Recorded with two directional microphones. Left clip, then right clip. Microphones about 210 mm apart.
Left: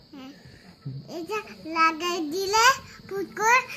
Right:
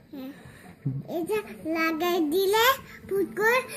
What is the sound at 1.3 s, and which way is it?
A child's voice, 5° right (ahead or behind).